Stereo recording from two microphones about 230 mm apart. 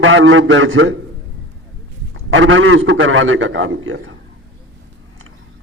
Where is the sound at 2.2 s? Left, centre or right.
Right.